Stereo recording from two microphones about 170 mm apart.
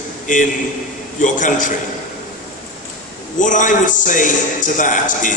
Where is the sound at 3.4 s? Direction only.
50° left (ahead or behind).